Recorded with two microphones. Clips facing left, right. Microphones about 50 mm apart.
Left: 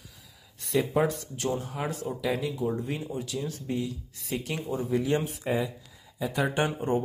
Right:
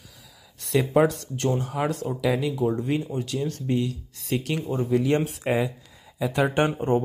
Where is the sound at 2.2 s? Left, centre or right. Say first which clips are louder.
Right 5 dB; right.